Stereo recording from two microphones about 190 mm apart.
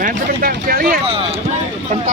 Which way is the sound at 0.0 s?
45° right (ahead or behind).